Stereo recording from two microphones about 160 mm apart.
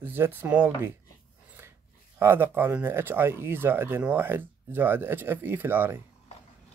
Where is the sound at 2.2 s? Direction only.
15° right (ahead or behind).